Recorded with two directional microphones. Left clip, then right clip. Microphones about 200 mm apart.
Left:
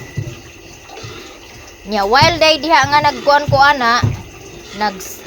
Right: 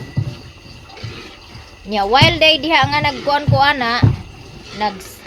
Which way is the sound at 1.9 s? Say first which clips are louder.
Left 1 dB; 5° left (ahead or behind).